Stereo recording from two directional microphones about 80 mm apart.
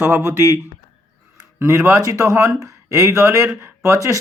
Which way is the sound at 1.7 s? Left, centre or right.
Right.